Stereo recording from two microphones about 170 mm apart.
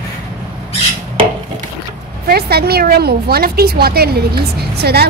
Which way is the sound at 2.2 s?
65° right (ahead or behind).